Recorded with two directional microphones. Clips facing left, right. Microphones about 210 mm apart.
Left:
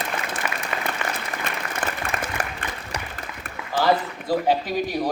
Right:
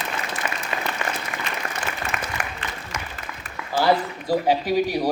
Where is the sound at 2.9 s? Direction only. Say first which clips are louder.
Left 2 dB; 35° left (ahead or behind).